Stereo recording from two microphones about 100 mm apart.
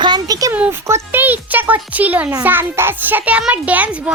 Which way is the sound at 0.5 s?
15° right (ahead or behind).